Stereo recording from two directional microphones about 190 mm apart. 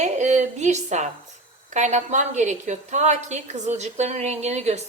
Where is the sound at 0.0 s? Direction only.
35° right (ahead or behind).